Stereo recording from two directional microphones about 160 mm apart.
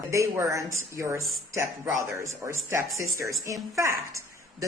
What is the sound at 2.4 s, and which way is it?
A woman's voice, 15° right (ahead or behind).